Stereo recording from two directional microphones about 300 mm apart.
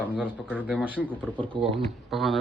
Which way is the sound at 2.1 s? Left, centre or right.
Centre.